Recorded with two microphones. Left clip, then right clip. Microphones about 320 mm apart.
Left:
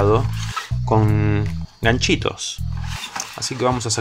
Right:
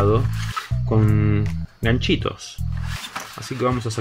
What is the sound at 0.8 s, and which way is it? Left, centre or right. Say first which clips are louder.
Speech: left 4 dB; centre.